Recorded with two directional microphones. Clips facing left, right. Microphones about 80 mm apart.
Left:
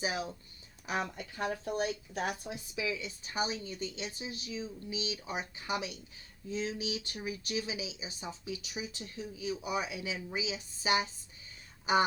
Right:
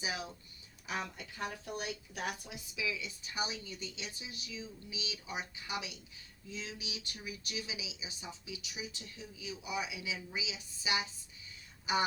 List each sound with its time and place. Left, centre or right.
0.0 s speech: left